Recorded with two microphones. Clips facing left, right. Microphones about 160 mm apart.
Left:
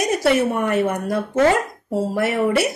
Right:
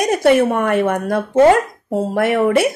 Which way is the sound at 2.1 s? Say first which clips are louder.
Right 5 dB; 55° right (ahead or behind).